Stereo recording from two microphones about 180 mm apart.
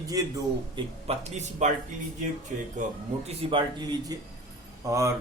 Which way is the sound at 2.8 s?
45° right (ahead or behind).